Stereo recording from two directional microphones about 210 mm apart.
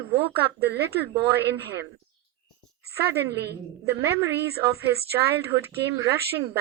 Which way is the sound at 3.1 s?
55° right (ahead or behind).